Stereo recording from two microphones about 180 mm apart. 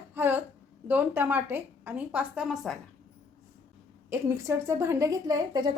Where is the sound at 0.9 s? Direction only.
10° right (ahead or behind).